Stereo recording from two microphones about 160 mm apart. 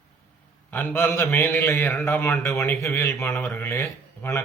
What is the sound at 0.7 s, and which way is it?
A man's voice, 10° left (ahead or behind).